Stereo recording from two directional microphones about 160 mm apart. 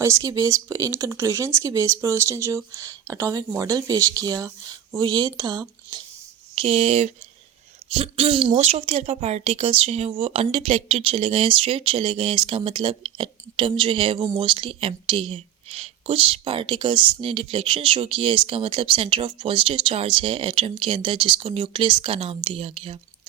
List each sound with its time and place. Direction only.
0.0 s speech: 20° right (ahead or behind)
6.6 s a woman's voice: 35° right (ahead or behind)